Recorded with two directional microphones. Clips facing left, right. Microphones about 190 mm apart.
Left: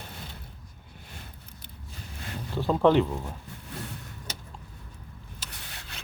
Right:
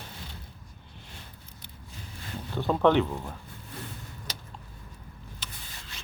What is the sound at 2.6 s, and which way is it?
Speech, 5° left (ahead or behind).